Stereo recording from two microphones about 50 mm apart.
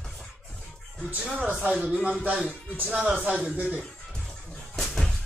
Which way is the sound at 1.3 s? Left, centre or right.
Centre.